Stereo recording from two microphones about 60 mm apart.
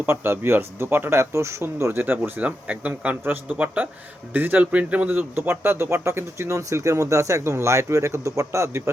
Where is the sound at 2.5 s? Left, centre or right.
Right.